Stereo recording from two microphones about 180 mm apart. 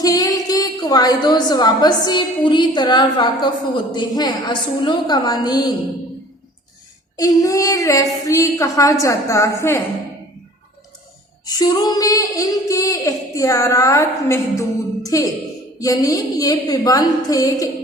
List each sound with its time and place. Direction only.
0.0 s a woman's voice: 20° left (ahead or behind)
3.9 s female singing: 25° left (ahead or behind)
7.2 s a woman's voice: 20° left (ahead or behind)
11.4 s female singing: 20° left (ahead or behind)